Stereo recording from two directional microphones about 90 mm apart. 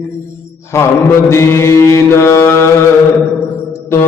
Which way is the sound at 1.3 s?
30° left (ahead or behind).